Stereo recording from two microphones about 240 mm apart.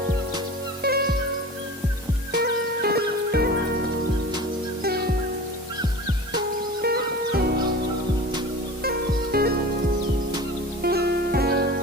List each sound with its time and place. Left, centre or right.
0.8 s music: right
2.3 s music: right
4.8 s music: right
6.8 s music: right
8.8 s music: right
10.8 s music: right